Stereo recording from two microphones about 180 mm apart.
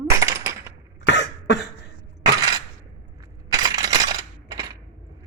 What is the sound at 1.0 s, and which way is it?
Cough, 85° left.